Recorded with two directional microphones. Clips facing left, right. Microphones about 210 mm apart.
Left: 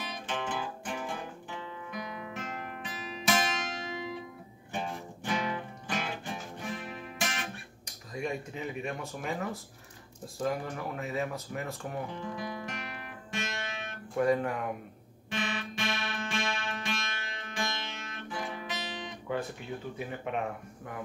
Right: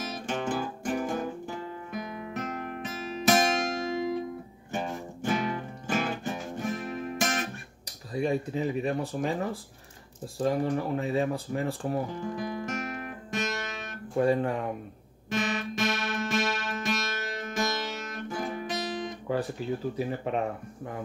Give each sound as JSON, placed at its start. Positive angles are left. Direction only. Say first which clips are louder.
{"t": 0.0, "sound": "guitar", "louder": "right 5 dB", "side_deg": -45}
{"t": 3.1, "sound": "music", "louder": "right 6 dB", "side_deg": -45}
{"t": 10.4, "sound": "speech", "louder": "right 6 dB", "side_deg": -30}
{"t": 14.1, "sound": "speech", "louder": "right 3 dB", "side_deg": -30}
{"t": 15.2, "sound": "music", "louder": "right 5 dB", "side_deg": -45}